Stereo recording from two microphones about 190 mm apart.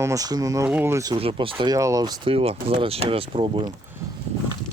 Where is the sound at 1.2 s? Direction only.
30° right (ahead or behind).